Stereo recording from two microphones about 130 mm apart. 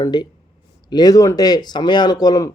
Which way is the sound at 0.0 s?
35° left (ahead or behind).